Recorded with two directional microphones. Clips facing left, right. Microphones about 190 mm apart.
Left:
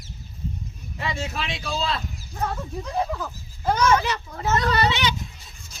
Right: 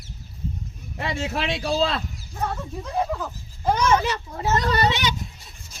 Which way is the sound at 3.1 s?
5° right (ahead or behind).